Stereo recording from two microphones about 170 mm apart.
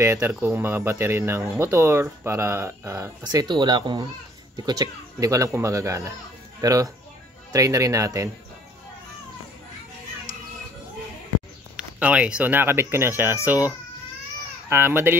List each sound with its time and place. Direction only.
0.0 s speech: 15° right (ahead or behind)
11.7 s speech: 5° right (ahead or behind)